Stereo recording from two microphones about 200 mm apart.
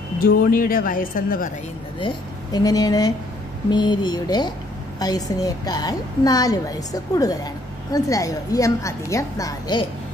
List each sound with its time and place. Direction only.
0.5 s a woman's voice: 45° left (ahead or behind)
2.0 s a woman's voice: 20° left (ahead or behind)